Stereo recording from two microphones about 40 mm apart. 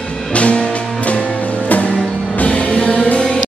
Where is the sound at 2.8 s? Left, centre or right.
Left.